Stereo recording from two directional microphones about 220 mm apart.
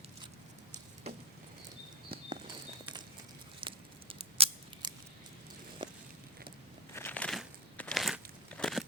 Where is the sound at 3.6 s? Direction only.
25° right (ahead or behind).